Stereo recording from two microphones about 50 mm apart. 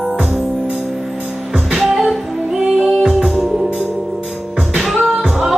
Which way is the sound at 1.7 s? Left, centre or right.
Centre.